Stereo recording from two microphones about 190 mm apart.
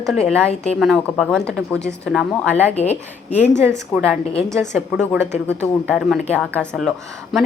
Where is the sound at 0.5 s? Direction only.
35° left (ahead or behind).